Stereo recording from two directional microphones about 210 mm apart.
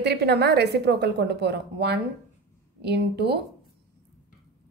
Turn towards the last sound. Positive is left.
turn(degrees=-50)  # may be behind; listen again after turning